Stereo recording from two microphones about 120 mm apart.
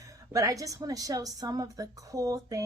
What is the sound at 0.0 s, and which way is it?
A woman's voice, 25° right (ahead or behind).